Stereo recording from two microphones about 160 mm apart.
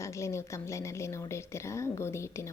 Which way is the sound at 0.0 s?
20° left (ahead or behind).